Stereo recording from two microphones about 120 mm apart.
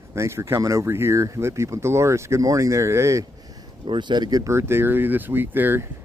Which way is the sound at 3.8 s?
40° right (ahead or behind).